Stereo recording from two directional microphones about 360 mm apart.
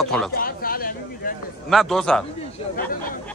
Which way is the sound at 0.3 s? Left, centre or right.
Left.